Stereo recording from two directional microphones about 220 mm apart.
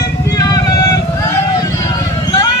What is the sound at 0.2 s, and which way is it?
Music, 15° left (ahead or behind).